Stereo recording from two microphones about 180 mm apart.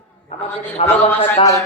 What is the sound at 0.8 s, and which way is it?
Speech, 40° left (ahead or behind).